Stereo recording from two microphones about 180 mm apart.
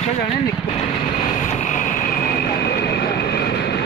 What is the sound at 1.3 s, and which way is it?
Vehicle, 40° left (ahead or behind).